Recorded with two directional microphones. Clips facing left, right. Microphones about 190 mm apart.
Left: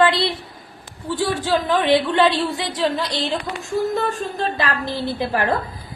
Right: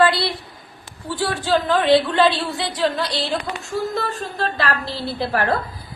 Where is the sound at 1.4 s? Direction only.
15° left (ahead or behind).